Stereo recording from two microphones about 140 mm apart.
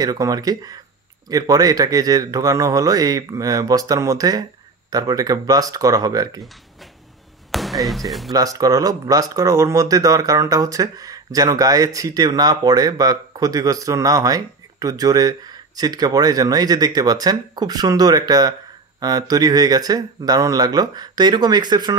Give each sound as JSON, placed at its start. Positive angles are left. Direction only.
{"t": 0.0, "sound": "speech", "side_deg": -25}
{"t": 7.5, "sound": "basketball bounce", "side_deg": 0}
{"t": 8.3, "sound": "speech", "side_deg": -25}